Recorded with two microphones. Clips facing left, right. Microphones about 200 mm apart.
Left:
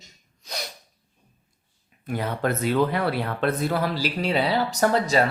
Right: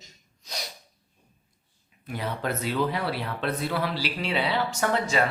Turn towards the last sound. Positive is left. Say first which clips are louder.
# left 5 dB
turn(degrees=40)  # may be behind; listen again after turning